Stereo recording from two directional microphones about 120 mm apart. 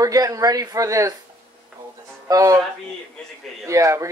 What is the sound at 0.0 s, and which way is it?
Speech, 30° right (ahead or behind).